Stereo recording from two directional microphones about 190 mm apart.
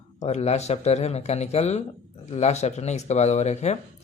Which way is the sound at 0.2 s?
35° left (ahead or behind).